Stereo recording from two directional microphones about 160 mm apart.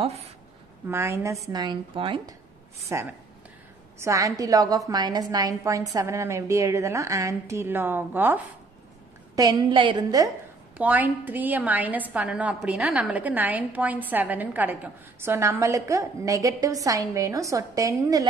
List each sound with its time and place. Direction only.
0.0 s a woman's voice: 40° right (ahead or behind)
0.8 s a woman's voice: 15° right (ahead or behind)
2.8 s a woman's voice: 15° right (ahead or behind)
9.3 s a woman's voice: 25° right (ahead or behind)
10.8 s a woman's voice: 10° right (ahead or behind)